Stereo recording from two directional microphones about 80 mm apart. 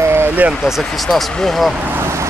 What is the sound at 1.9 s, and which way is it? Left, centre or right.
Vehicle, right.